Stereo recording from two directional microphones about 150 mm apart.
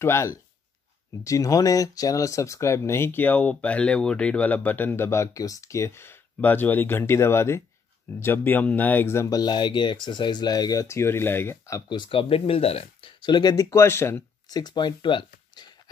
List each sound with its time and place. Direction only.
0.0 s speech: 20° left (ahead or behind)
14.6 s speech: 30° left (ahead or behind)